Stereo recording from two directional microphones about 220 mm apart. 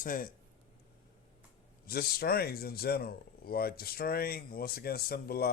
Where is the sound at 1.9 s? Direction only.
45° left (ahead or behind).